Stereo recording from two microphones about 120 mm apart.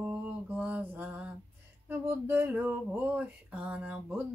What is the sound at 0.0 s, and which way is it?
Mantra, 15° right (ahead or behind).